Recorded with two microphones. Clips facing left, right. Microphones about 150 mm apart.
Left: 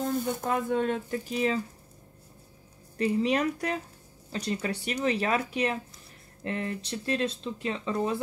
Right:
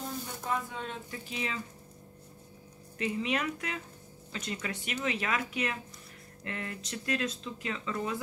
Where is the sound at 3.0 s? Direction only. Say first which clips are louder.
Left 6 dB; 35° left (ahead or behind).